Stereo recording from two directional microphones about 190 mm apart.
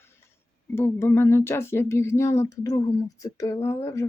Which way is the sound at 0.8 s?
15° left (ahead or behind).